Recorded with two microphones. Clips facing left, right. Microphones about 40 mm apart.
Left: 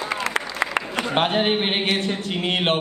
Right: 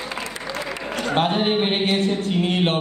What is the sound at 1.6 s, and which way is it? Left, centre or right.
A woman's voice, left.